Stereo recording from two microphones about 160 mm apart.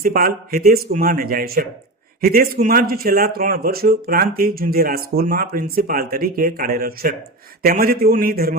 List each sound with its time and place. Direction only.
0.0 s speech: 65° right (ahead or behind)